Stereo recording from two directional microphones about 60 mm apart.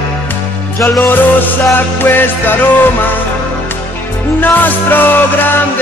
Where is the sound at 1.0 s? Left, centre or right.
Left.